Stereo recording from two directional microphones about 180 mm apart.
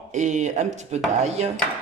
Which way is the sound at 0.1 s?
45° right (ahead or behind).